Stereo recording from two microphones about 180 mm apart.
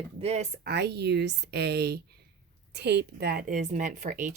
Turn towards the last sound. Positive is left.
turn(degrees=-45)  # may be behind; listen again after turning